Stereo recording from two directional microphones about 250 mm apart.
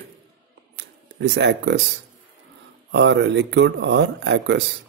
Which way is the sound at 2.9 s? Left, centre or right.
Right.